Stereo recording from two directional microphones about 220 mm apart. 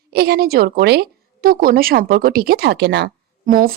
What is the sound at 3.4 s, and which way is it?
Speech, 40° right (ahead or behind).